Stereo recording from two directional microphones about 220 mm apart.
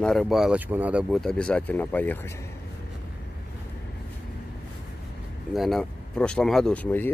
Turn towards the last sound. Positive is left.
turn(degrees=10)  # may be behind; listen again after turning